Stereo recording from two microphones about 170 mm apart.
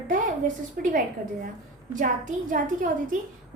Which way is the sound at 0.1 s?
50° right (ahead or behind).